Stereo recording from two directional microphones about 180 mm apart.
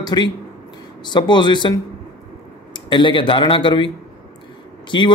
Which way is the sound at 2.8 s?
25° left (ahead or behind).